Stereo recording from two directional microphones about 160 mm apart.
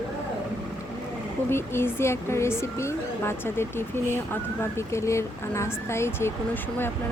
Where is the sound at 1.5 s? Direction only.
15° left (ahead or behind).